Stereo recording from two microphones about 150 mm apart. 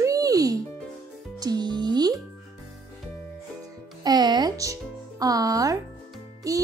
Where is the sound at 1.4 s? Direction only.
30° right (ahead or behind).